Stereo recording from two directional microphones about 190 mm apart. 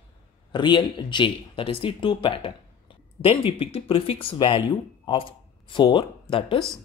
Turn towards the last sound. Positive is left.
turn(degrees=25)  # may be behind; listen again after turning